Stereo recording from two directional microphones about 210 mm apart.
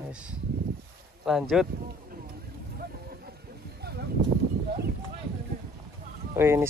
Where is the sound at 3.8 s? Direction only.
50° right (ahead or behind).